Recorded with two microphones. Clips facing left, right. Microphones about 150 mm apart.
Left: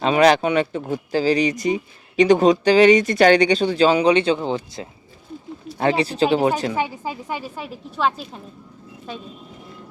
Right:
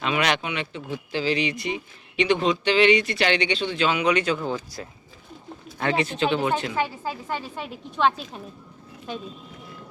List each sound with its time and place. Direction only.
0.0 s speech: 35° left (ahead or behind)
6.7 s a woman's voice: 15° left (ahead or behind)
7.5 s a woman's voice: centre (ahead or behind)